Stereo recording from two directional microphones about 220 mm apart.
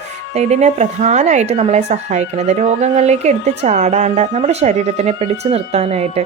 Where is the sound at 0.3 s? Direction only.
30° right (ahead or behind).